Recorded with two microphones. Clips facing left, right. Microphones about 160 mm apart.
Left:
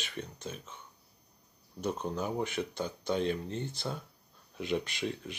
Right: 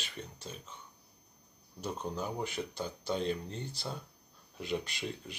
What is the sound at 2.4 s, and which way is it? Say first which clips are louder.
Speech: left 3 dB; 55° left (ahead or behind).